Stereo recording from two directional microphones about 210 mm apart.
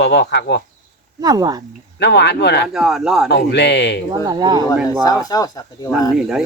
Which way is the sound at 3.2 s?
55° left (ahead or behind).